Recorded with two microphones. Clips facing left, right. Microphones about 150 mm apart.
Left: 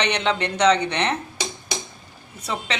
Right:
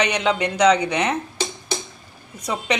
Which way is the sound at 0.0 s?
10° right (ahead or behind).